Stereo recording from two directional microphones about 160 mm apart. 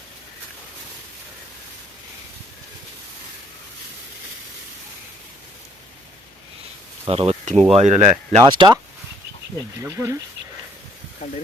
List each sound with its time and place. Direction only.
7.0 s speech: 35° right (ahead or behind)
8.5 s speech: 25° right (ahead or behind)
9.8 s speech: 15° right (ahead or behind)
11.2 s speech: 45° left (ahead or behind)